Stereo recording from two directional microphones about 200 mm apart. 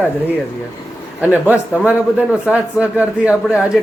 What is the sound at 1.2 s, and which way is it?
A man's voice, 10° right (ahead or behind).